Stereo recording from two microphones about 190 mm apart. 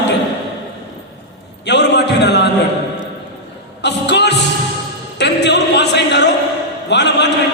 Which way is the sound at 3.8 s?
65° left (ahead or behind).